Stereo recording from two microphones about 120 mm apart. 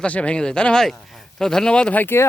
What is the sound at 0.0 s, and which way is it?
Speech, 10° left (ahead or behind).